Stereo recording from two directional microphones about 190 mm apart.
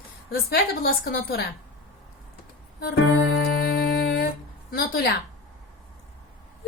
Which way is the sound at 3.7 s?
50° left (ahead or behind).